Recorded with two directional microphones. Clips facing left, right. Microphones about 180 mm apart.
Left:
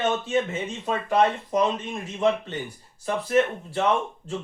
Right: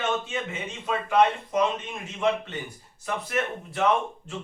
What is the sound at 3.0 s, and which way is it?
Speech, 30° left (ahead or behind).